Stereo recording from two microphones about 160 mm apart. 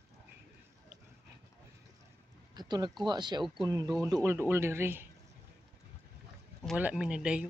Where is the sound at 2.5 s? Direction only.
25° right (ahead or behind).